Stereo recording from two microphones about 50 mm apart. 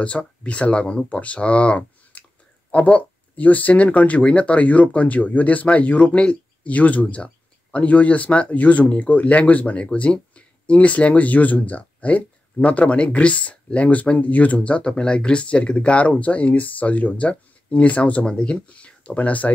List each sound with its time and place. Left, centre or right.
0.0 s speech: left